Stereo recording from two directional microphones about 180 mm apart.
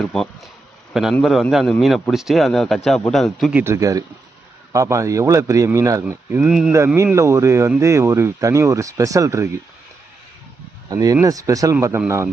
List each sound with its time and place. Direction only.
0.0 s a man's voice: centre (ahead or behind)
3.6 s speech: 15° right (ahead or behind)
6.7 s speech: 15° right (ahead or behind)
10.8 s speech: 20° right (ahead or behind)